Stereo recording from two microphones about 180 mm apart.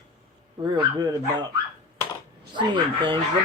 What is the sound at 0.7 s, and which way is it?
Speech, 20° right (ahead or behind).